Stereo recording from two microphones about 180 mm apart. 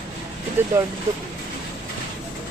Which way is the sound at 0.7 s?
15° right (ahead or behind).